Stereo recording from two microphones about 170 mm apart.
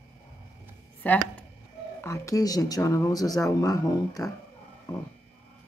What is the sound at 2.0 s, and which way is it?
Speech, 20° left (ahead or behind).